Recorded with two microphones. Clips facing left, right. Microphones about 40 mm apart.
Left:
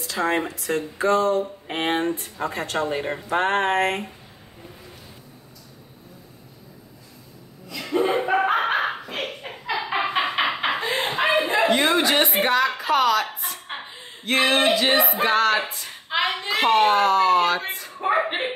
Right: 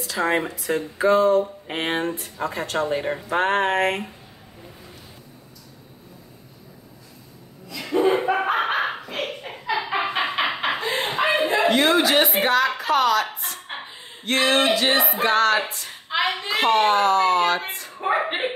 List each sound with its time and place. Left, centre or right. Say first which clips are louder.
0.0 s speech: right 1 dB; centre
7.7 s laughter: right 2 dB; centre
10.8 s speech: even; centre